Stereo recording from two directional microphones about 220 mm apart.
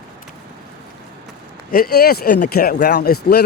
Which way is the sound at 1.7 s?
45° left (ahead or behind).